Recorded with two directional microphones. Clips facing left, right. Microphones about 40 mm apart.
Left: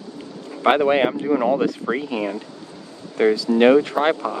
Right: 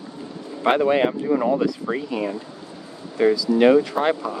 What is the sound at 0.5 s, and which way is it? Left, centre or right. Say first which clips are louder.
Speech: left 2 dB; left.